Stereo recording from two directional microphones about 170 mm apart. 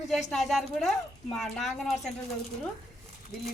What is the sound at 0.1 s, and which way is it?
Speech, centre (ahead or behind).